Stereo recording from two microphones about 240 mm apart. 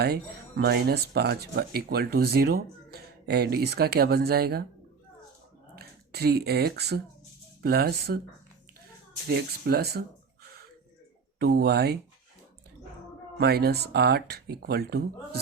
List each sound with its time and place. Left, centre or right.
0.0 s speech: right
5.7 s speech: right
9.3 s speech: right
11.3 s speech: right
13.4 s speech: right